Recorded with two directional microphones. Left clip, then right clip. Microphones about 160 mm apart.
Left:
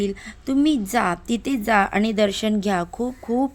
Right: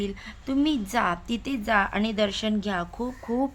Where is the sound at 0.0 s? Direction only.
25° left (ahead or behind).